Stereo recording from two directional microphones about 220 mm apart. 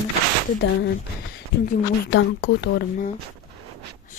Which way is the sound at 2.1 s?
50° left (ahead or behind).